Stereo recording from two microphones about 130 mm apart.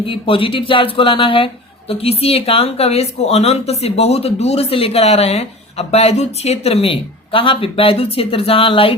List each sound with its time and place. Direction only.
0.0 s a woman's voice: 40° left (ahead or behind)